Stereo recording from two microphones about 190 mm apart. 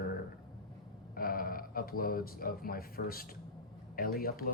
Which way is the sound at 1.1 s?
50° left (ahead or behind).